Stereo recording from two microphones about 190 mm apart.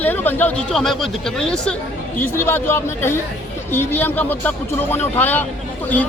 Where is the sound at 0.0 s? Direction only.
10° left (ahead or behind).